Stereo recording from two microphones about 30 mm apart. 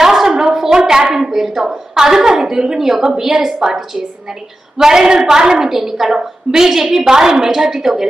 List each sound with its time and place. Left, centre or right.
0.0 s a sound: centre
0.8 s hands: centre
1.1 s a woman's voice: centre
5.6 s a woman's voice: centre